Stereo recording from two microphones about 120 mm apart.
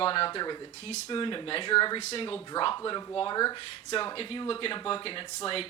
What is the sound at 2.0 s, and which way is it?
Speech, 60° left (ahead or behind).